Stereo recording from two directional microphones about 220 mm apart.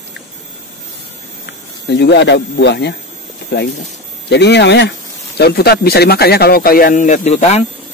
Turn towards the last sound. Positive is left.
turn(degrees=30)  # may be behind; listen again after turning